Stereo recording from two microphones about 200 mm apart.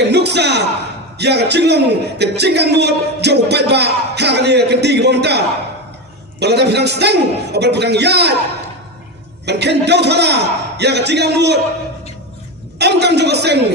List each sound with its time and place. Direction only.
0.0 s a sound: 55° right (ahead or behind)
1.2 s a man's voice: 55° right (ahead or behind)
6.4 s a man's voice: 55° right (ahead or behind)
9.5 s a man's voice: 55° right (ahead or behind)
12.8 s a man's voice: 55° right (ahead or behind)